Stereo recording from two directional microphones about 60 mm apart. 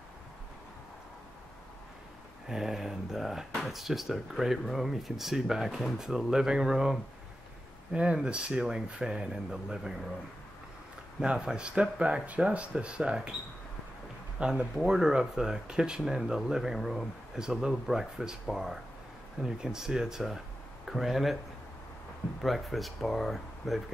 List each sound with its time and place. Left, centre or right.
2.4 s speech: centre
11.1 s speech: centre
14.4 s speech: centre
22.4 s speech: centre